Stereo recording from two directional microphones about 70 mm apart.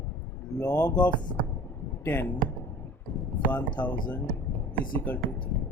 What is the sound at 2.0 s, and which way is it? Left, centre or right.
Speech, left.